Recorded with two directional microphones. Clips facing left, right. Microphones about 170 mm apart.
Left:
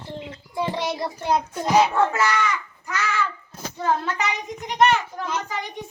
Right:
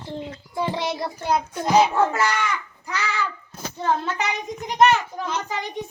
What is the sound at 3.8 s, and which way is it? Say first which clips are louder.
Child singing: even; centre (ahead or behind).